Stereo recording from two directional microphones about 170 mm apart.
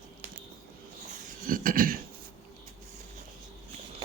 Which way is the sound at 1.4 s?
55° right (ahead or behind).